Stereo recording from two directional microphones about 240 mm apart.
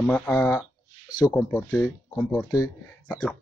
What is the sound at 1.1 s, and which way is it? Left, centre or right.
Speech, centre.